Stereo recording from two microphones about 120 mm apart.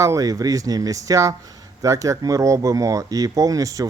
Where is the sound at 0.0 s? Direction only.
30° right (ahead or behind).